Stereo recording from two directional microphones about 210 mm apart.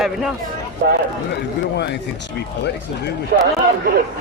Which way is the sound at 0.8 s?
50° right (ahead or behind).